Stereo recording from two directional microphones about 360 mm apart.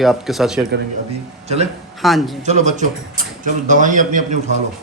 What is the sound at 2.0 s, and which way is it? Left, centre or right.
Speech, centre.